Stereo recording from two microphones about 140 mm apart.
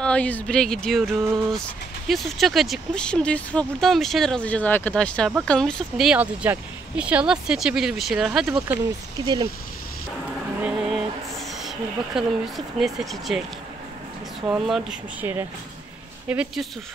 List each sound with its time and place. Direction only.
0.0 s speech: 10° left (ahead or behind)
9.2 s speech: 30° right (ahead or behind)
10.6 s a sound: 5° right (ahead or behind)
11.6 s speech: 5° right (ahead or behind)
16.3 s speech: 10° right (ahead or behind)